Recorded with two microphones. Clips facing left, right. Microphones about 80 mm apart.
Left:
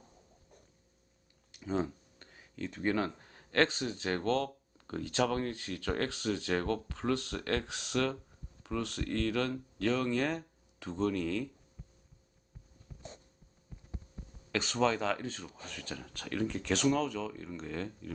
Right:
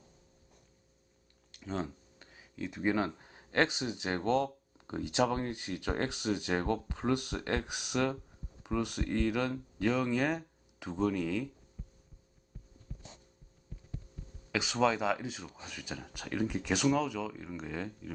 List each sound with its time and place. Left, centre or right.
1.5 s speech: centre
11.8 s heart sounds: centre
12.9 s a sound: centre
13.7 s heart sounds: centre
14.2 s heart murmur: left
14.5 s speech: centre